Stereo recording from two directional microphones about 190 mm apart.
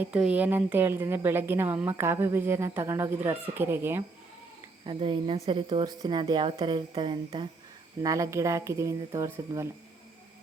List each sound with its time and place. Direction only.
0.0 s speech: 5° right (ahead or behind)
4.9 s speech: 25° right (ahead or behind)